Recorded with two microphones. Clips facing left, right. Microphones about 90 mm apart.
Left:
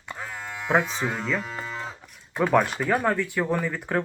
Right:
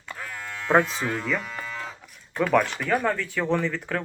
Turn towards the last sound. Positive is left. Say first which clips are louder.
# right 1 dB
turn(degrees=15)  # may be behind; listen again after turning